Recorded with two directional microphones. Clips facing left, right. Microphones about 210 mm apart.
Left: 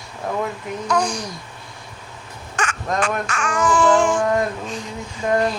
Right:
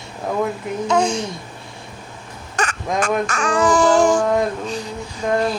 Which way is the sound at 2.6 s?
40° right (ahead or behind).